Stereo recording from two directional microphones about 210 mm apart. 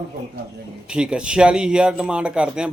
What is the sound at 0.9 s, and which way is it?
A man's voice, 5° right (ahead or behind).